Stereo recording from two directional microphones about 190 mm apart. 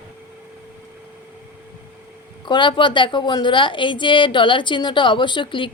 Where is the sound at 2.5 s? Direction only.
25° left (ahead or behind).